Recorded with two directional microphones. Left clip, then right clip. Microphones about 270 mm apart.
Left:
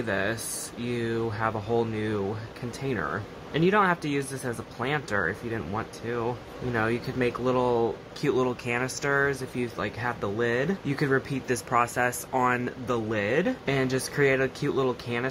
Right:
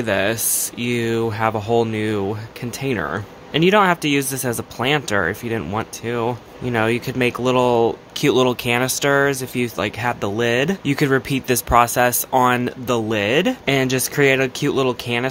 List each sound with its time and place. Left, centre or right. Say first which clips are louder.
0.0 s speech: right 9 dB; right